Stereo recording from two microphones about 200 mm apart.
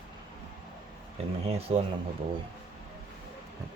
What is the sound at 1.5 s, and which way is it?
Speech, 30° right (ahead or behind).